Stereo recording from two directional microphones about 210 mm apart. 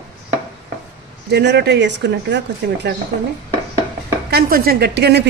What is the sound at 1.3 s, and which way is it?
A woman's voice, 55° right (ahead or behind).